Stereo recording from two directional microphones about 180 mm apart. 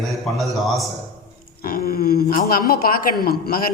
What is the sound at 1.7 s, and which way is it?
Speech, 55° left (ahead or behind).